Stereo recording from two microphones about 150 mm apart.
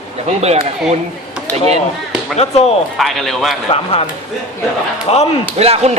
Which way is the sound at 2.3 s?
45° left (ahead or behind).